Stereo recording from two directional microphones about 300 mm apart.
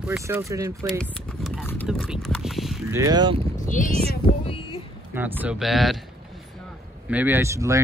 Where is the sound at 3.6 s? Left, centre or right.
Left.